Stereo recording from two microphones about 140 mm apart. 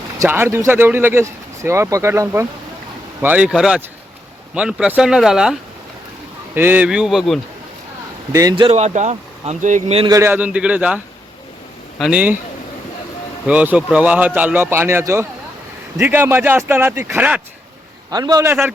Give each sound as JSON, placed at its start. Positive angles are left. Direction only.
{"t": 0.2, "sound": "speech", "side_deg": -15}
{"t": 6.5, "sound": "speech", "side_deg": -15}
{"t": 8.3, "sound": "a man's voice", "side_deg": -25}
{"t": 8.5, "sound": "speech", "side_deg": -35}
{"t": 8.8, "sound": "speech", "side_deg": -55}
{"t": 10.1, "sound": "speech", "side_deg": -20}
{"t": 13.5, "sound": "speech", "side_deg": -10}
{"t": 18.1, "sound": "a man's voice", "side_deg": -25}